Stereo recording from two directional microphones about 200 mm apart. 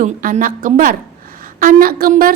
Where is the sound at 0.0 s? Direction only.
40° right (ahead or behind).